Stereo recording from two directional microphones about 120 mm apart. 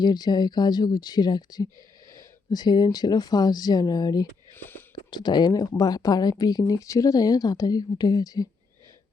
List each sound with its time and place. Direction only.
0.0 s speech: 35° left (ahead or behind)
4.5 s a sound: 15° left (ahead or behind)
5.1 s speech: 35° left (ahead or behind)